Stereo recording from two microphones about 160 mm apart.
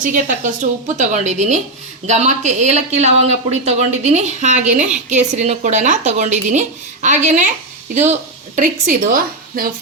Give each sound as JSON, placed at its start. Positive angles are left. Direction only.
{"t": 0.0, "sound": "speech", "side_deg": -55}
{"t": 8.9, "sound": "a woman's voice", "side_deg": -60}